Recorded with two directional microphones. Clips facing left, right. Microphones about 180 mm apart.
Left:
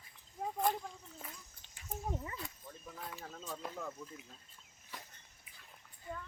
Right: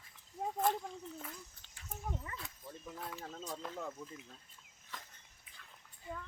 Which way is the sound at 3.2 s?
15° right (ahead or behind).